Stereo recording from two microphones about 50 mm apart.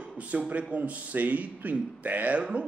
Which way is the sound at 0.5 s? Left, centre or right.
Right.